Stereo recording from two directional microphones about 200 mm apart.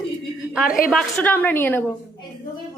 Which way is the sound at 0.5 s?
5° right (ahead or behind).